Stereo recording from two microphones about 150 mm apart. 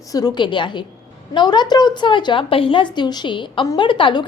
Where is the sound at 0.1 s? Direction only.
25° left (ahead or behind).